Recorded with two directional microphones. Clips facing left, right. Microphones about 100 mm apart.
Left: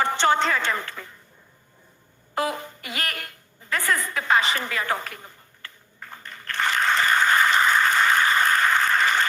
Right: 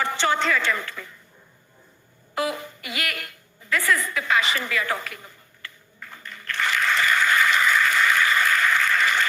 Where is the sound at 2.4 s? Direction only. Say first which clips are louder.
Even; 35° left (ahead or behind).